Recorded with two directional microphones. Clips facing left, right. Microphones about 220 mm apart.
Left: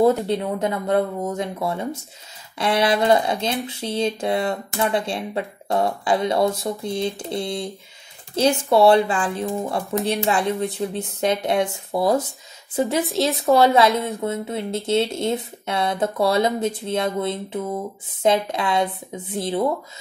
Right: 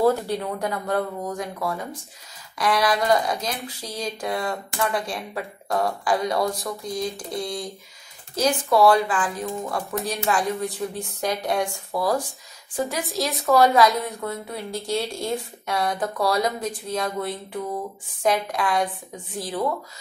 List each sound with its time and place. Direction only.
0.0 s speech: 20° left (ahead or behind)
13.3 s a woman's voice: centre (ahead or behind)
13.6 s speech: 25° left (ahead or behind)